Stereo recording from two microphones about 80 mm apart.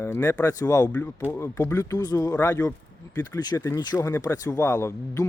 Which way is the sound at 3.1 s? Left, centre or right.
Left.